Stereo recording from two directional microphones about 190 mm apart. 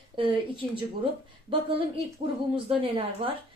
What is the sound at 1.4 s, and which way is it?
A woman's voice, 30° right (ahead or behind).